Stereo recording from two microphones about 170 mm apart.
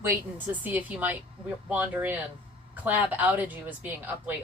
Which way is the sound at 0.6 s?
10° right (ahead or behind).